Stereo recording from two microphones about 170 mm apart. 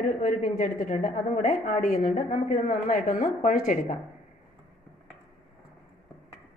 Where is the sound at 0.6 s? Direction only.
50° left (ahead or behind).